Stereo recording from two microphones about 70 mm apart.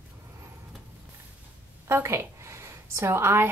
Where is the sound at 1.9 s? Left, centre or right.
Right.